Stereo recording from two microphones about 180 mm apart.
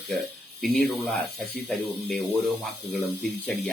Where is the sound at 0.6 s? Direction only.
Centre (ahead or behind).